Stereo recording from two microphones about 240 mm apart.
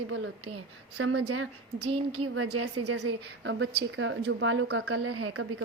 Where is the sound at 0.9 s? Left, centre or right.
Right.